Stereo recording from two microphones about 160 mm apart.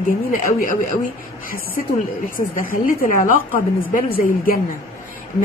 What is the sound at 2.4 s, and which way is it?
Speech, 60° left (ahead or behind).